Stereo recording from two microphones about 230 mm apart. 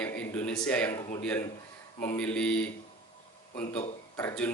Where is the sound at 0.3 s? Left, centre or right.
Centre.